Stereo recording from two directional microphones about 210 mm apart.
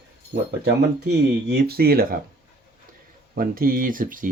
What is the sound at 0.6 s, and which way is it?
Speech, 50° right (ahead or behind).